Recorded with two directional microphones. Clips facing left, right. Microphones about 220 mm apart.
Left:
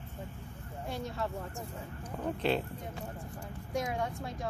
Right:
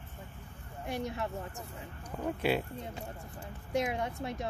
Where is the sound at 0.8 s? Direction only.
15° right (ahead or behind).